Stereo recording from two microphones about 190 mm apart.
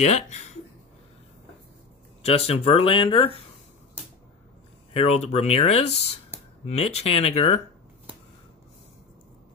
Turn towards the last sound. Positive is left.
turn(degrees=30)  # may be behind; listen again after turning